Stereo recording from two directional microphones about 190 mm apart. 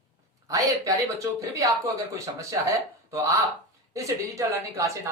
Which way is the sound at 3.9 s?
15° right (ahead or behind).